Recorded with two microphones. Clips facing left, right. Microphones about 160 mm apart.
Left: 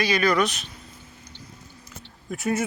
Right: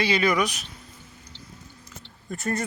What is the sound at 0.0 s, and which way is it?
Speech, 25° right (ahead or behind).